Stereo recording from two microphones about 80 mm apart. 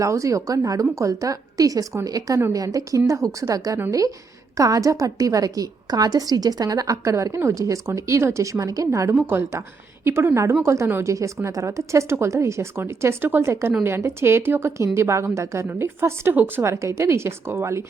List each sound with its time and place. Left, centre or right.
0.0 s a woman's voice: right
9.1 s a woman's voice: right
16.6 s a woman's voice: right